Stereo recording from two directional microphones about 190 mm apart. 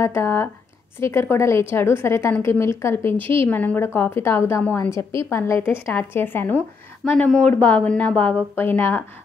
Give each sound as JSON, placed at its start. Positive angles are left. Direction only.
{"t": 0.0, "sound": "a woman's voice", "side_deg": 15}
{"t": 3.2, "sound": "a woman's voice", "side_deg": -25}
{"t": 3.4, "sound": "a woman's voice", "side_deg": 10}